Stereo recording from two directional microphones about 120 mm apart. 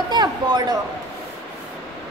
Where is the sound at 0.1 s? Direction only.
35° right (ahead or behind).